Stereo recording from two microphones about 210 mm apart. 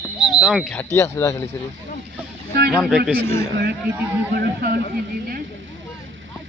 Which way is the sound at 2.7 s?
Centre (ahead or behind).